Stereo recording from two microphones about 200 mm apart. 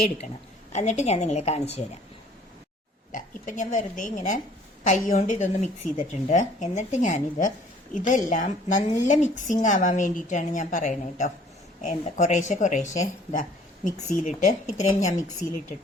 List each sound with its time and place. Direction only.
0.7 s a woman's voice: 35° left (ahead or behind)
3.1 s a woman's voice: 40° left (ahead or behind)